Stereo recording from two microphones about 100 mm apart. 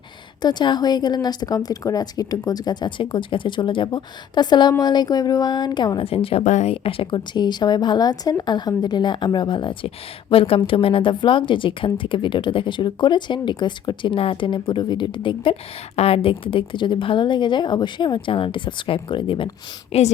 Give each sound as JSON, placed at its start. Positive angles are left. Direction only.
{"t": 0.4, "sound": "a woman's voice", "side_deg": 45}
{"t": 6.1, "sound": "a woman's voice", "side_deg": 70}
{"t": 16.0, "sound": "a woman's voice", "side_deg": 75}
{"t": 19.9, "sound": "a woman's voice", "side_deg": 90}